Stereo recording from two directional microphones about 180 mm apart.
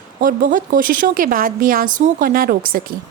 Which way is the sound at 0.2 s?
50° right (ahead or behind).